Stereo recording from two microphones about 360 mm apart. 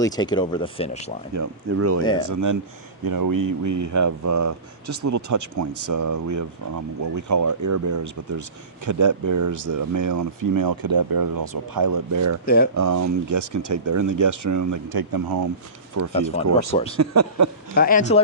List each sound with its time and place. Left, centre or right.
0.0 s speech: centre
1.3 s speech: right
2.0 s speech: centre
2.3 s speech: right
16.1 s speech: centre
17.0 s speech: right
17.7 s speech: left